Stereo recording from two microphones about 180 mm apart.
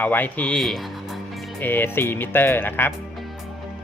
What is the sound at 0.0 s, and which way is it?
Speech, 10° left (ahead or behind).